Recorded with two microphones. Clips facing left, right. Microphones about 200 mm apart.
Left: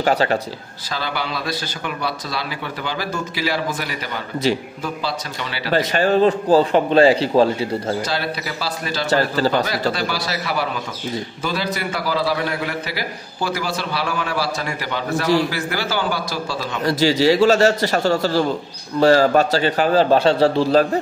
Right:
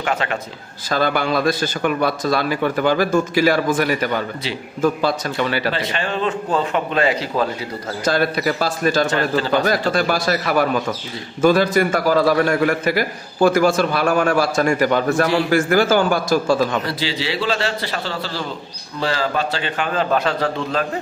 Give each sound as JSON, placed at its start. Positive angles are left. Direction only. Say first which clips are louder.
{"t": 0.0, "sound": "a man's voice", "louder": "left 5 dB", "side_deg": 35}
{"t": 0.8, "sound": "a man's voice", "louder": "right 7 dB", "side_deg": -50}
{"t": 5.8, "sound": "a man's voice", "louder": "left 7 dB", "side_deg": 40}
{"t": 8.0, "sound": "a man's voice", "louder": "right 6 dB", "side_deg": -50}
{"t": 9.0, "sound": "a man's voice", "louder": "left 1 dB", "side_deg": 40}
{"t": 9.7, "sound": "a man's voice", "louder": "right 4 dB", "side_deg": -50}
{"t": 16.8, "sound": "a man's voice", "louder": "left 8 dB", "side_deg": 45}